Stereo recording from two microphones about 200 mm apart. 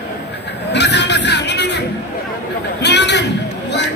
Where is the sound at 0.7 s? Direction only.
60° left (ahead or behind).